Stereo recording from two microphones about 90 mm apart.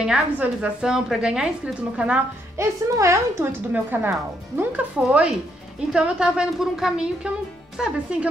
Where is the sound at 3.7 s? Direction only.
20° right (ahead or behind).